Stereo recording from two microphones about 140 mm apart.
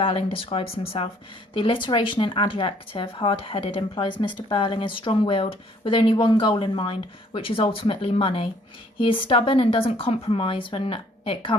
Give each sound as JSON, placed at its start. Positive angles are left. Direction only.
{"t": 0.0, "sound": "speech", "side_deg": 40}